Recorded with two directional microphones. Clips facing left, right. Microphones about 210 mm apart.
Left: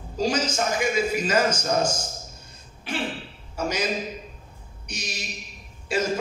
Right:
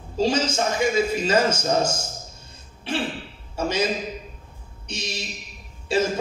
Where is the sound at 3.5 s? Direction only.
25° right (ahead or behind).